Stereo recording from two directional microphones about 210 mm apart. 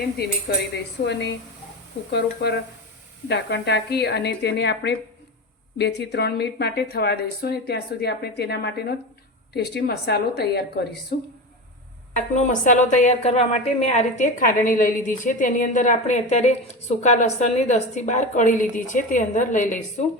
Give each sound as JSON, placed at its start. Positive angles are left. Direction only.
{"t": 0.2, "sound": "a woman's voice", "side_deg": 50}
{"t": 12.1, "sound": "a woman's voice", "side_deg": 35}